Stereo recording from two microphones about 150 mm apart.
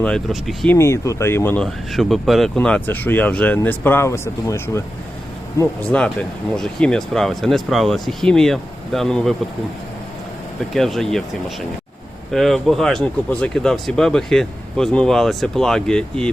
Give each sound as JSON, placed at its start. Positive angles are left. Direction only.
{"t": 0.0, "sound": "speech", "side_deg": 5}
{"t": 0.7, "sound": "speech", "side_deg": 20}
{"t": 1.6, "sound": "speech", "side_deg": 0}
{"t": 5.9, "sound": "speech", "side_deg": 10}
{"t": 10.8, "sound": "speech", "side_deg": 0}